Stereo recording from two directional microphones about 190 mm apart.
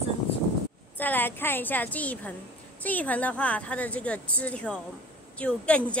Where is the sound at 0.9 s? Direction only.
10° left (ahead or behind).